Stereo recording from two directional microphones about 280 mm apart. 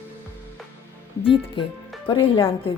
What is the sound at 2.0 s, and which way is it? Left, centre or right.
Speech, centre.